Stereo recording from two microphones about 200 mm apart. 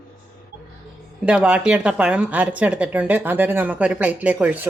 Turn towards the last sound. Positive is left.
turn(degrees=-5)  # may be behind; listen again after turning